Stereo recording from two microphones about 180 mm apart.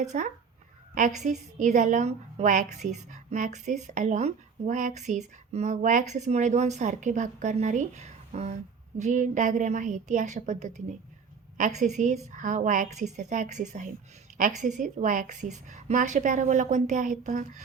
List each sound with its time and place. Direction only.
0.0 s a woman's voice: 40° right (ahead or behind)